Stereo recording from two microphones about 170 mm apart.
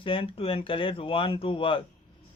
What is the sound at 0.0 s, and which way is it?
Speech, 30° left (ahead or behind).